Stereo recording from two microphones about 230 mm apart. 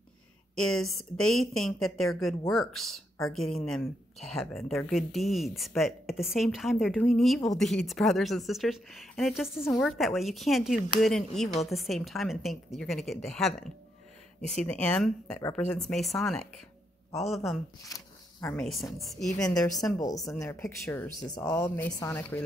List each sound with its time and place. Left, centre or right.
0.6 s a woman's voice: centre
11.4 s a woman's voice: left
11.7 s a woman's voice: centre
17.8 s a woman's voice: centre
20.2 s speech: centre
21.2 s speech: centre